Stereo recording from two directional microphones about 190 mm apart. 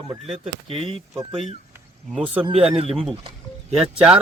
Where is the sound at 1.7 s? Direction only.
10° right (ahead or behind).